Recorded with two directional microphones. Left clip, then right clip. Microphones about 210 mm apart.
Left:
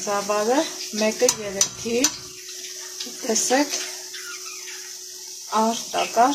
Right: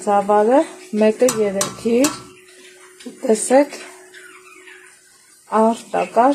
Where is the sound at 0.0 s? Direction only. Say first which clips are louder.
Right 8 dB; 35° right (ahead or behind).